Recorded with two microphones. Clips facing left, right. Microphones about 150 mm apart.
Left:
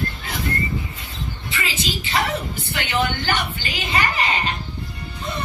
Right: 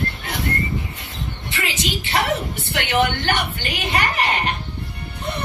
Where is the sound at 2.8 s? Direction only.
70° right (ahead or behind).